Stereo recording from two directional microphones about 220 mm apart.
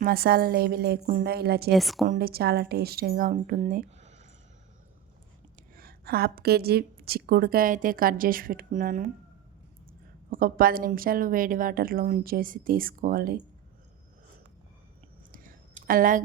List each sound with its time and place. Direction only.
0.0 s a woman's voice: 45° right (ahead or behind)
1.7 s a woman's voice: centre (ahead or behind)
2.0 s a woman's voice: 45° right (ahead or behind)
5.7 s a woman's voice: 45° right (ahead or behind)
10.2 s a woman's voice: 40° right (ahead or behind)
15.3 s a sound: 40° right (ahead or behind)